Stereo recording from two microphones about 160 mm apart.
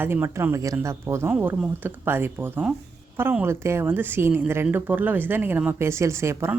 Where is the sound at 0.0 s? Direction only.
15° right (ahead or behind).